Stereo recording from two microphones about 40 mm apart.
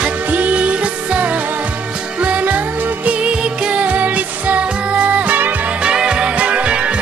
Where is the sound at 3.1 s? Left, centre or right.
Right.